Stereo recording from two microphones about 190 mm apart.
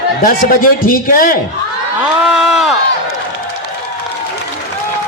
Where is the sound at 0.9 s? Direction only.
50° left (ahead or behind).